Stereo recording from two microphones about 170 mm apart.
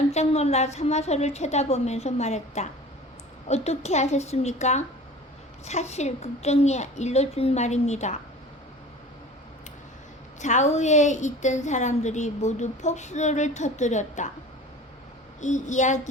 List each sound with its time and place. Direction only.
0.1 s a woman's voice: 40° left (ahead or behind)
10.4 s a woman's voice: 45° left (ahead or behind)
15.4 s a woman's voice: 45° left (ahead or behind)